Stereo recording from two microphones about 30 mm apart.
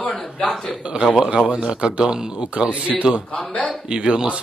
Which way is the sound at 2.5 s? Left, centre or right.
Right.